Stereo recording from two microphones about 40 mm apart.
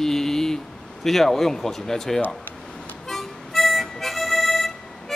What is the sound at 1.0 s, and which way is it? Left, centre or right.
Speech, centre.